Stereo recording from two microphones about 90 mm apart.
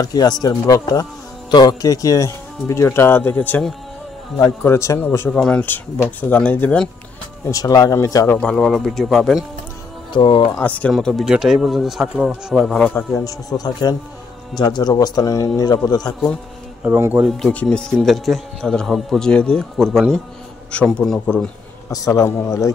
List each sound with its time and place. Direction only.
0.0 s speech: 45° left (ahead or behind); by 3.6 s 20° left (ahead or behind)
4.4 s speech: 30° left (ahead or behind)
5.3 s speech: 15° left (ahead or behind)
7.4 s speech: 40° left (ahead or behind)
8.4 s speech: 10° left (ahead or behind)
10.1 s speech: 70° left (ahead or behind)
10.6 s speech: 15° left (ahead or behind)
10.9 s speech: 5° left (ahead or behind)
11.2 s speech: 5° right (ahead or behind)
13.2 s speech: 40° left (ahead or behind)
16.8 s speech: 20° right (ahead or behind)
17.5 s speech: 15° left (ahead or behind)
19.8 s speech: 5° right (ahead or behind)
21.8 s speech: 40° left (ahead or behind)